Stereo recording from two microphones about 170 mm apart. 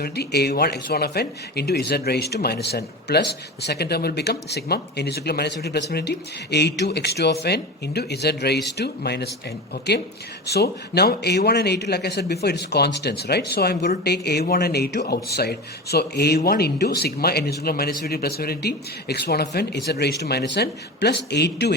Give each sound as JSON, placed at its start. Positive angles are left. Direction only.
{"t": 0.0, "sound": "speech", "side_deg": 70}
{"t": 9.9, "sound": "speech", "side_deg": 90}
{"t": 10.4, "sound": "speech", "side_deg": 75}